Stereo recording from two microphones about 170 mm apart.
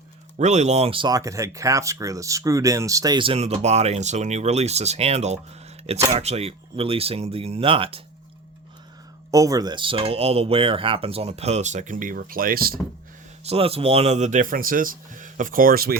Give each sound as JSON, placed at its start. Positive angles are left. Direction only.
{"t": 0.3, "sound": "speech", "side_deg": -40}
{"t": 9.3, "sound": "speech", "side_deg": -20}
{"t": 13.4, "sound": "speech", "side_deg": -35}